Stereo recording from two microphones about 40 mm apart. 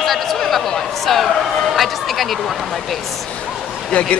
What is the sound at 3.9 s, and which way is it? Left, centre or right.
Speech, left.